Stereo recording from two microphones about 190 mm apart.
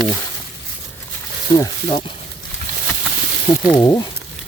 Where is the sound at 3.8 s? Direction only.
20° left (ahead or behind).